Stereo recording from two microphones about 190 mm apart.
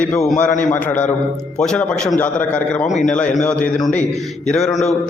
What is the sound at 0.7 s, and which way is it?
A man's voice, 10° left (ahead or behind).